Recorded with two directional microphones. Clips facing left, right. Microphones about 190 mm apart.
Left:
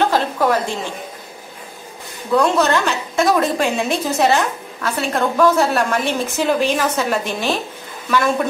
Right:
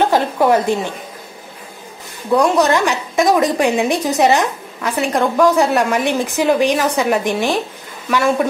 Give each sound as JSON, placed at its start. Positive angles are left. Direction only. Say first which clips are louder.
{"t": 0.0, "sound": "a woman's voice", "louder": "right 3 dB", "side_deg": -15}
{"t": 2.3, "sound": "a woman's voice", "louder": "right 2 dB", "side_deg": -15}